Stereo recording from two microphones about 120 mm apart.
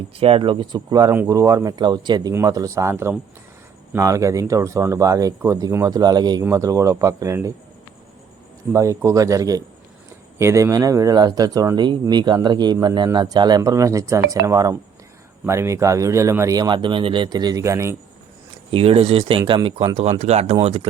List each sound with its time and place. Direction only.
0.2 s speech: 50° right (ahead or behind); by 7.5 s 25° right (ahead or behind)
8.7 s speech: 25° right (ahead or behind)
18.7 s speech: 50° right (ahead or behind)
19.4 s speech: 35° right (ahead or behind)
19.6 s speech: 50° right (ahead or behind)